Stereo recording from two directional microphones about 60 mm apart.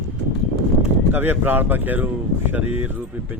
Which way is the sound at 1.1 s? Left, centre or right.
Right.